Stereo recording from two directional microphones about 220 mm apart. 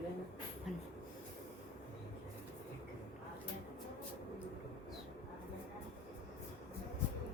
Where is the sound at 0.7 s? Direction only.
Centre (ahead or behind).